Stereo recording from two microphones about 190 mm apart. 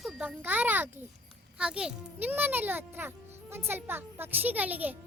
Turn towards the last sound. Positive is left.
turn(degrees=-10)  # may be behind; listen again after turning